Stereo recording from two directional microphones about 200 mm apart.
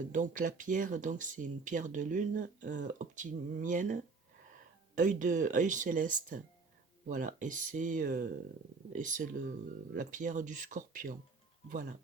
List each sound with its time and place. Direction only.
0.1 s speech: 40° right (ahead or behind)
4.9 s speech: 40° right (ahead or behind)